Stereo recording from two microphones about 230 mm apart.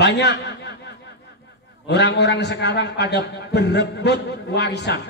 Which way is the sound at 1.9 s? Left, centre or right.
Left.